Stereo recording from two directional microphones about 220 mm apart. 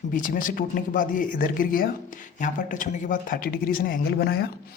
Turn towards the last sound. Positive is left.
turn(degrees=45)  # may be behind; listen again after turning